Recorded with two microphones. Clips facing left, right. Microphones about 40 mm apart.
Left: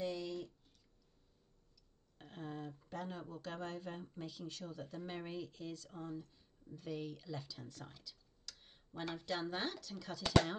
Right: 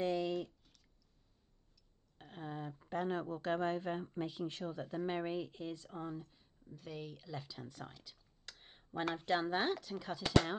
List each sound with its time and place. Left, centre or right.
0.0 s a sound: right
2.1 s a sound: centre
2.8 s speech: right
6.7 s speech: centre
8.0 s computer keyboard: right
9.1 s speech: right